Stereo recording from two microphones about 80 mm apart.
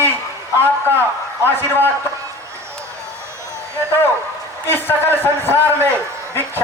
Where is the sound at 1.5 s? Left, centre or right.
Left.